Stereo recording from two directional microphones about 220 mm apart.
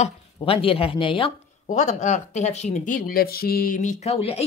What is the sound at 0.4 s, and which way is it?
A woman's voice, 25° left (ahead or behind).